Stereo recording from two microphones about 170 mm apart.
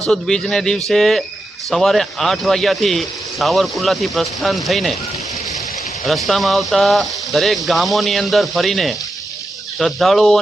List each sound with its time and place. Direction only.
0.1 s speech: 5° left (ahead or behind)
6.1 s speech: centre (ahead or behind)